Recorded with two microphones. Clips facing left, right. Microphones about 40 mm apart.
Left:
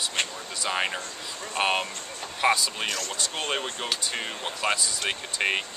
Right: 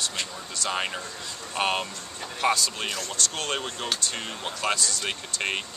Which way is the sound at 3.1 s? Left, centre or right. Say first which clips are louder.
Even; centre.